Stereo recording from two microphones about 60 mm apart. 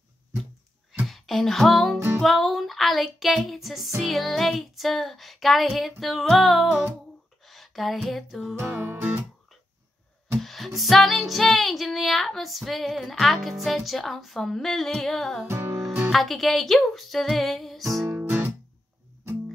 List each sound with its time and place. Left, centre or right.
1.0 s music: centre
10.4 s music: centre
15.4 s music: right
16.1 s music: centre
18.1 s guitar: right